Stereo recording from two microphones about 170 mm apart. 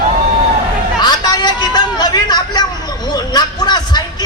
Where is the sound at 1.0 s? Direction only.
25° left (ahead or behind).